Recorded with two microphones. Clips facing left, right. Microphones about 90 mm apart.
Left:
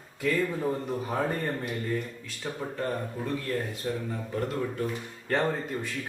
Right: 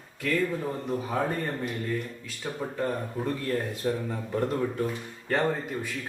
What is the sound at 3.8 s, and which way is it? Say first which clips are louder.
Speech: right 5 dB; 15° right (ahead or behind).